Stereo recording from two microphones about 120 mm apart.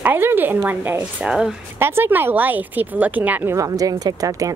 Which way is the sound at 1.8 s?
20° right (ahead or behind).